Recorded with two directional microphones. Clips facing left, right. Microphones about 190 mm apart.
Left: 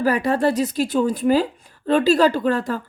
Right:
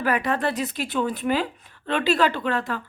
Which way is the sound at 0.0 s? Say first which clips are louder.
Left 5 dB; 35° left (ahead or behind).